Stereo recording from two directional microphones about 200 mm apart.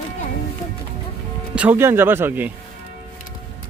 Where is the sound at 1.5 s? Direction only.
10° right (ahead or behind).